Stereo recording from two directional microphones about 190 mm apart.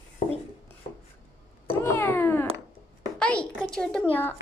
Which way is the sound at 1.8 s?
10° left (ahead or behind).